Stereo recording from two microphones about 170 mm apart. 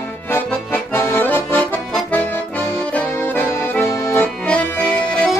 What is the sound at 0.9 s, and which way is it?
Accordion, 15° left (ahead or behind).